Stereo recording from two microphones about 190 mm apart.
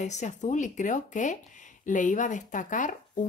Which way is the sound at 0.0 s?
40° left (ahead or behind).